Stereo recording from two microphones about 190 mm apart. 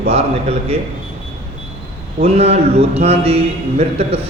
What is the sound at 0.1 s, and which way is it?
Mantra, 30° right (ahead or behind).